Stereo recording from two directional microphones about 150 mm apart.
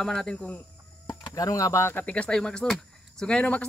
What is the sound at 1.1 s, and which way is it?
Speech, 25° left (ahead or behind).